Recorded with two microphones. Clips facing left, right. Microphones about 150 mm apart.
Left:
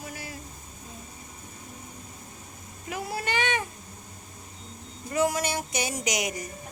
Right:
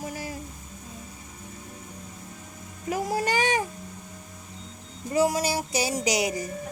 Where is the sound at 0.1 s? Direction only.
40° right (ahead or behind).